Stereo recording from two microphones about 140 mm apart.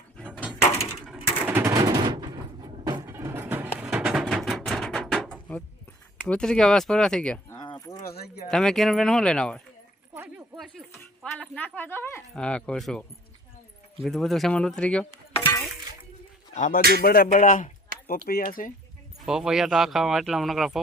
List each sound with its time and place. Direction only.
0.6 s a sound: 50° left (ahead or behind)
1.0 s a sound: 10° right (ahead or behind)
1.6 s a sound: 30° right (ahead or behind)
2.8 s music: 25° right (ahead or behind); by 5.4 s centre (ahead or behind)
6.2 s speech: 5° left (ahead or behind)
7.5 s keys jangling: 30° left (ahead or behind)
8.4 s speech: 5° left (ahead or behind)
10.2 s a sound: 5° right (ahead or behind); by 12.2 s 15° left (ahead or behind)
12.3 s speech: 5° left (ahead or behind)
16.6 s speech: 65° left (ahead or behind)
16.9 s speech: 90° left; by 17.7 s 70° left (ahead or behind)
18.3 s speech: 90° left
19.2 s speech: 5° right (ahead or behind)